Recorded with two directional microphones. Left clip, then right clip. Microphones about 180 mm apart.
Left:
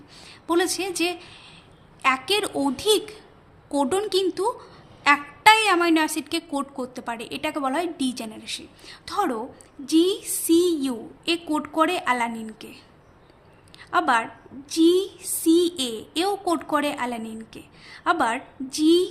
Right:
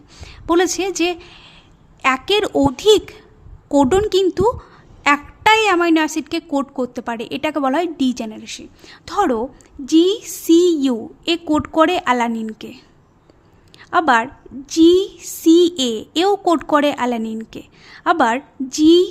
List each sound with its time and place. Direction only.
0.2 s a woman's voice: 50° right (ahead or behind)